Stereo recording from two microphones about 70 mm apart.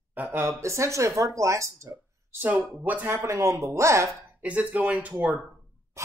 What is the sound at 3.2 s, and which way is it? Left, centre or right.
Speech, right.